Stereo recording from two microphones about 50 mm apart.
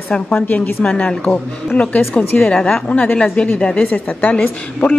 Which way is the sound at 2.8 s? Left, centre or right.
Left.